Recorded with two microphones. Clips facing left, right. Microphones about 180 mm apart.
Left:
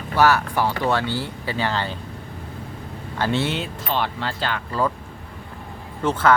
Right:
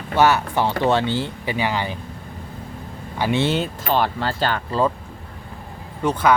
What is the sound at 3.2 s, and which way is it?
Speech, 15° right (ahead or behind).